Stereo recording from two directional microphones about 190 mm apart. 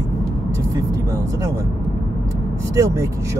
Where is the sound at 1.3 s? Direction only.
15° right (ahead or behind).